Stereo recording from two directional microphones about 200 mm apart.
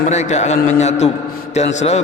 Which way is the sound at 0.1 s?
35° left (ahead or behind).